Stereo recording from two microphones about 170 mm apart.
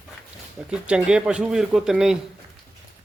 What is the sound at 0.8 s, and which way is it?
Speech, 5° right (ahead or behind).